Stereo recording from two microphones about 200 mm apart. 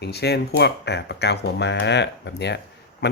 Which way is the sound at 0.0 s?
55° left (ahead or behind).